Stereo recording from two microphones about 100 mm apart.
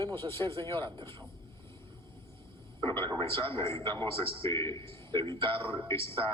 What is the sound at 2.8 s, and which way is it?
Speech, 25° left (ahead or behind).